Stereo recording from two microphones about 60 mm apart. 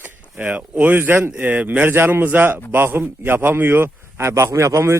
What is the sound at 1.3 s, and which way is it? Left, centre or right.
Speech, right.